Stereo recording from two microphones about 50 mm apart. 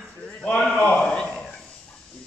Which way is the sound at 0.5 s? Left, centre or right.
Centre.